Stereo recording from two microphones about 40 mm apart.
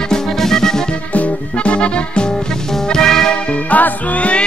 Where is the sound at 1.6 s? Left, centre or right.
Left.